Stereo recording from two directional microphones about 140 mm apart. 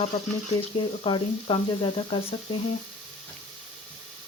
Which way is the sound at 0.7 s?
35° left (ahead or behind).